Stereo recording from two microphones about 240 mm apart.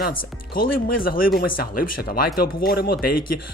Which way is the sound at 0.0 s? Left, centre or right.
Left.